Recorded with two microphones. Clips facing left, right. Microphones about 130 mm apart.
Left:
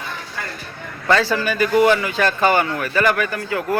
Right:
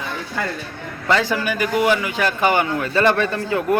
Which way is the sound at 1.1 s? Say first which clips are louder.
Left 1 dB; 15° right (ahead or behind).